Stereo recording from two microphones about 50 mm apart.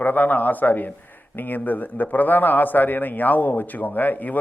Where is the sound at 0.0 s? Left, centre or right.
Left.